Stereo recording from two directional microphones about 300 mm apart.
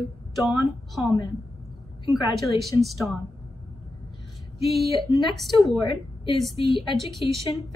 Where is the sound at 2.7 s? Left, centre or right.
Centre.